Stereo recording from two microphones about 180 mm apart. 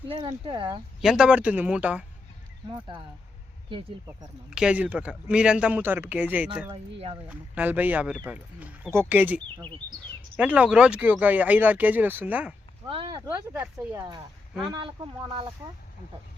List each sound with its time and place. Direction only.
0.1 s speech: 30° right (ahead or behind)
1.0 s speech: 5° right (ahead or behind)
3.7 s speech: 30° right (ahead or behind)
4.5 s speech: 5° right (ahead or behind)
9.6 s speech: 25° right (ahead or behind)
10.3 s speech: 10° right (ahead or behind)
12.8 s speech: 25° right (ahead or behind)
13.2 s speech: 10° right (ahead or behind)